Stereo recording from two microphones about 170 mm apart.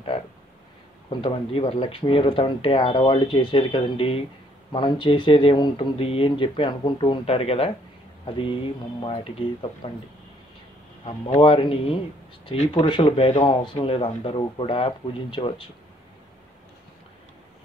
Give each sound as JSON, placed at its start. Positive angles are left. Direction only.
{"t": 1.1, "sound": "speech", "side_deg": 30}
{"t": 11.2, "sound": "speech", "side_deg": 35}